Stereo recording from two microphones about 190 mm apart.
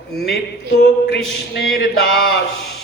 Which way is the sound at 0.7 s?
60° left (ahead or behind).